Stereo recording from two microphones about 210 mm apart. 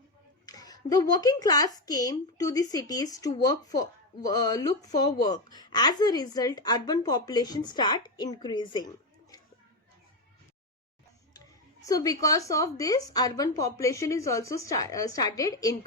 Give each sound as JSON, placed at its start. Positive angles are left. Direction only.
{"t": 0.4, "sound": "a woman's voice", "side_deg": 20}
{"t": 11.3, "sound": "speech", "side_deg": 15}